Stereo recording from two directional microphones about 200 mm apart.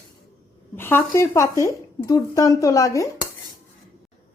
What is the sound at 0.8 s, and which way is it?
Speech, 10° left (ahead or behind).